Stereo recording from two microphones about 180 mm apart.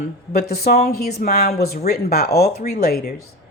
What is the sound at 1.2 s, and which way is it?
Speech, 50° left (ahead or behind).